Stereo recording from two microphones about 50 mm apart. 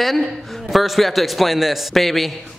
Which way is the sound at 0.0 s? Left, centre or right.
Centre.